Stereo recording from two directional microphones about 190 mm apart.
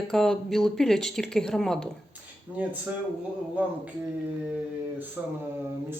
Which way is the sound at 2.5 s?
10° right (ahead or behind).